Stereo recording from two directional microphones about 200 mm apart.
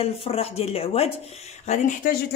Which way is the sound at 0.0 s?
30° left (ahead or behind).